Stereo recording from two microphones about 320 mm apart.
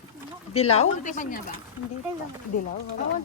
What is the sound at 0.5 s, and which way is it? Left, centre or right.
Speech, centre.